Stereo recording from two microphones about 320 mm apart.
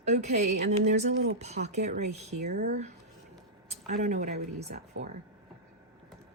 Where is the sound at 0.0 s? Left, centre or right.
Right.